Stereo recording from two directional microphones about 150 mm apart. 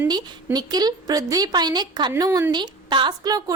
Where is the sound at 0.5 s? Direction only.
25° right (ahead or behind).